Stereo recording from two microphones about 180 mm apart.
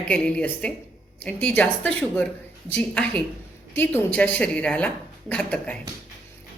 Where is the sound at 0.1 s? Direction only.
5° left (ahead or behind).